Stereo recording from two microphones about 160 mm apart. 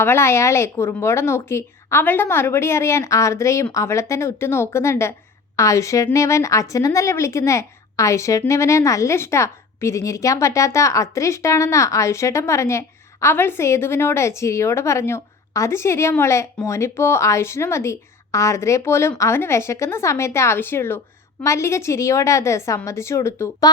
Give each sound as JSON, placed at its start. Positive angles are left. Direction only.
{"t": 0.0, "sound": "a woman's voice", "side_deg": 15}